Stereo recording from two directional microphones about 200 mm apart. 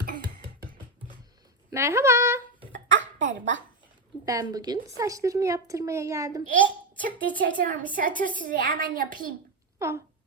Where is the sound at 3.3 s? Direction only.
65° right (ahead or behind).